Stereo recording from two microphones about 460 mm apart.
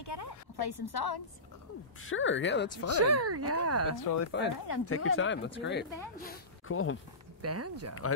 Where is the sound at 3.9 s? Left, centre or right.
Left.